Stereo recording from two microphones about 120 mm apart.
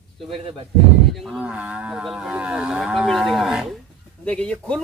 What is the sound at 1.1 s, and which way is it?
Cattle, centre (ahead or behind).